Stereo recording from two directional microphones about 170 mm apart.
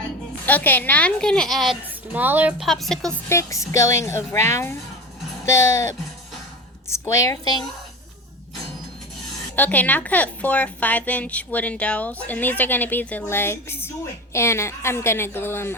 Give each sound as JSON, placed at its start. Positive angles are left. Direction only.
{"t": 0.4, "sound": "a woman's voice", "side_deg": 10}
{"t": 3.2, "sound": "a woman's voice", "side_deg": 15}
{"t": 9.6, "sound": "a woman's voice", "side_deg": 10}